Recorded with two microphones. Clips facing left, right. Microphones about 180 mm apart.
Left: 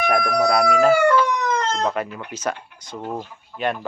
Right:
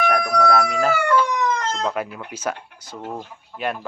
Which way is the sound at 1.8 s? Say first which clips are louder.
Left 1 dB; 5° right (ahead or behind).